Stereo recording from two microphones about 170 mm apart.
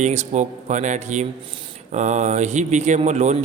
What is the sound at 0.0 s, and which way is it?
Speech, 45° right (ahead or behind).